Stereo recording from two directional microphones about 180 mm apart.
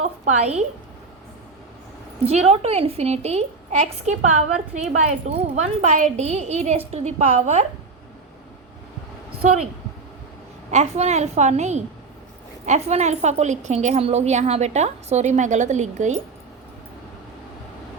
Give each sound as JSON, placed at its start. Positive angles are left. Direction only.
{"t": 0.0, "sound": "a sound", "side_deg": -40}
{"t": 2.2, "sound": "a woman's voice", "side_deg": -35}
{"t": 10.7, "sound": "a woman's voice", "side_deg": -40}